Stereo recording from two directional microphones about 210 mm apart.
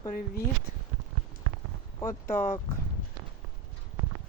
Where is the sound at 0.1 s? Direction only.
40° left (ahead or behind).